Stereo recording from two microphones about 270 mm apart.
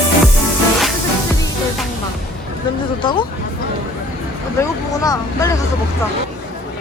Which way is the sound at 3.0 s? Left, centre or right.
Centre.